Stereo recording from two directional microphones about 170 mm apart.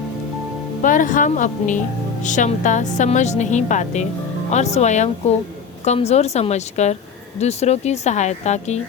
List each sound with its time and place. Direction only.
0.8 s a woman's voice: 50° left (ahead or behind)